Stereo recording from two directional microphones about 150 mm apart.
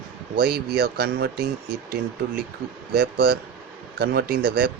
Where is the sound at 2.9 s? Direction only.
90° right.